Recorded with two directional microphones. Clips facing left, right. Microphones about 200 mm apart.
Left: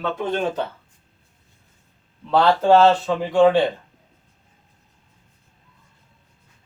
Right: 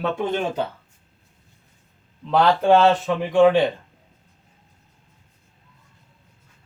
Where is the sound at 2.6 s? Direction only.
15° right (ahead or behind).